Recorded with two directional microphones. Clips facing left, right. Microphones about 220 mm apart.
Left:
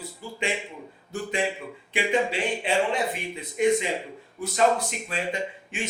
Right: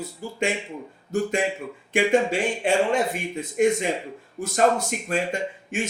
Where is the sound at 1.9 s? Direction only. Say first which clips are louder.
Right 5 dB; 45° right (ahead or behind).